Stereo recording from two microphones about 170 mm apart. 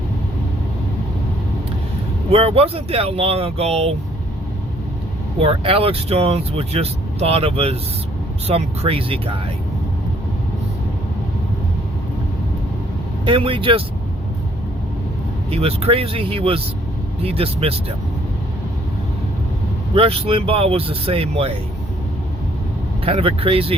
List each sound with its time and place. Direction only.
2.3 s speech: 35° right (ahead or behind)
5.4 s speech: 35° right (ahead or behind)
13.2 s speech: 30° right (ahead or behind)
15.4 s speech: 35° right (ahead or behind)
19.9 s speech: 35° right (ahead or behind)
23.0 s speech: 35° right (ahead or behind)